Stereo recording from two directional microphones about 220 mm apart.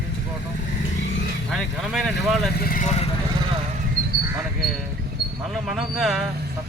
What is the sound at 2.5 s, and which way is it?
Speech, 40° left (ahead or behind).